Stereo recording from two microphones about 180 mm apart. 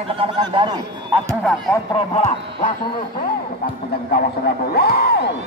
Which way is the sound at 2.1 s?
35° left (ahead or behind).